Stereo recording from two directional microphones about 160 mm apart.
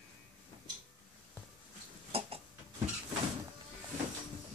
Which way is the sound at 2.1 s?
40° right (ahead or behind).